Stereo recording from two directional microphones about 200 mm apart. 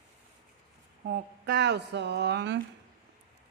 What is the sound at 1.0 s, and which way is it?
Speech, 55° right (ahead or behind).